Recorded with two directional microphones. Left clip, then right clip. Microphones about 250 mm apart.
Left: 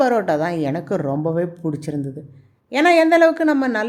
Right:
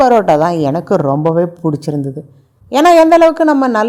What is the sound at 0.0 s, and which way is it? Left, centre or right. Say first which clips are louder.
A woman's voice: right 9 dB; centre.